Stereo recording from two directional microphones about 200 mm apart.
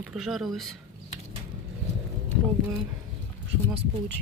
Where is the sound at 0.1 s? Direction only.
Centre (ahead or behind).